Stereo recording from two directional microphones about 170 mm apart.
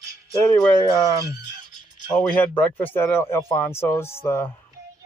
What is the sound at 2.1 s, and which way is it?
Speech, 10° left (ahead or behind).